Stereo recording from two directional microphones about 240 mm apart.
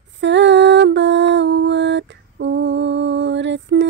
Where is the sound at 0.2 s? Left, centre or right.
Right.